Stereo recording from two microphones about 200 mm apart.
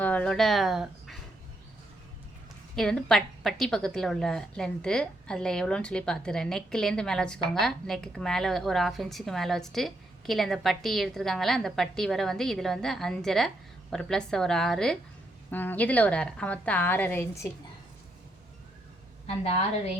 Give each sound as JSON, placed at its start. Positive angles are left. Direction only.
{"t": 0.0, "sound": "speech", "side_deg": 5}
{"t": 2.7, "sound": "a woman's voice", "side_deg": 0}